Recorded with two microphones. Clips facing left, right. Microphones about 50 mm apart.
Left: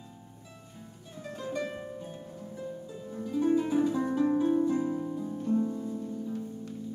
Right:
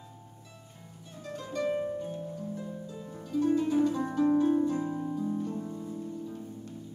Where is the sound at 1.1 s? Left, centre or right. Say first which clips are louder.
Left 1 dB; centre.